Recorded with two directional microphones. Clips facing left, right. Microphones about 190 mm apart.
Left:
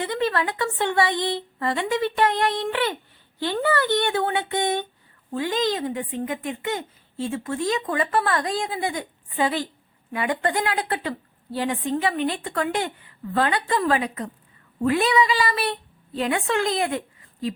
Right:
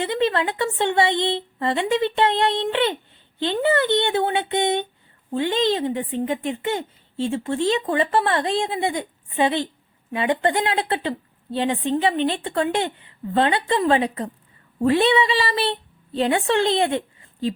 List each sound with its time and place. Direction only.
0.0 s a woman's voice: 25° right (ahead or behind)